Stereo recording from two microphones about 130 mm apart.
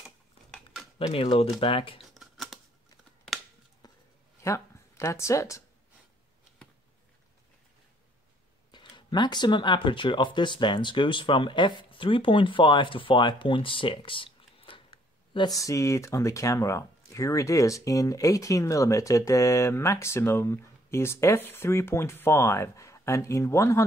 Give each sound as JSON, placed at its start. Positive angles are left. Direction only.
{"t": 0.9, "sound": "speech", "side_deg": 45}
{"t": 2.0, "sound": "scissors", "side_deg": 0}
{"t": 3.8, "sound": "a sound", "side_deg": 30}
{"t": 4.4, "sound": "speech", "side_deg": 20}
{"t": 8.7, "sound": "speech", "side_deg": 35}
{"t": 15.3, "sound": "speech", "side_deg": 30}